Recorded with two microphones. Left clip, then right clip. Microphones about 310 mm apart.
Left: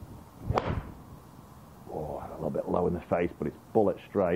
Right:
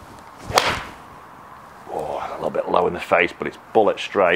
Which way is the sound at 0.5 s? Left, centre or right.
Centre.